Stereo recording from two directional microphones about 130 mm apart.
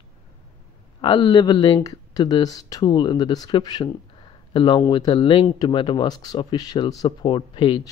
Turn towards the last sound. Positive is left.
turn(degrees=40)  # may be behind; listen again after turning